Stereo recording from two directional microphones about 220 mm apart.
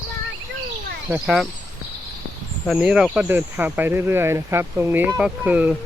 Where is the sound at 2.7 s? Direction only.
5° right (ahead or behind).